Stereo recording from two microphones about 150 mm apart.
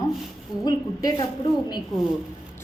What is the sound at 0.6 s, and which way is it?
A woman's voice, 25° left (ahead or behind).